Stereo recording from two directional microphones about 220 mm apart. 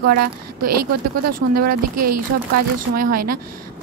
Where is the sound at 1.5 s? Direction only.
45° right (ahead or behind).